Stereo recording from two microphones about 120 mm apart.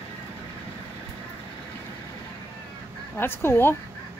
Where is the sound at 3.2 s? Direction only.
20° left (ahead or behind).